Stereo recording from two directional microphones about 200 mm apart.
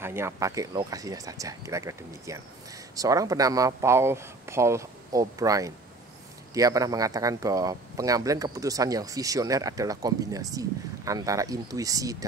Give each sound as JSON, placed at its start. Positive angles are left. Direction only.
{"t": 0.0, "sound": "speech", "side_deg": -10}